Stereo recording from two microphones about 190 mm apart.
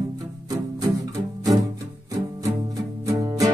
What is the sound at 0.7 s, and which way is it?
Music, 20° right (ahead or behind).